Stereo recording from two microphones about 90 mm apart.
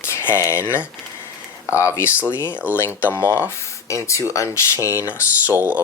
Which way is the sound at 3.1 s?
30° left (ahead or behind).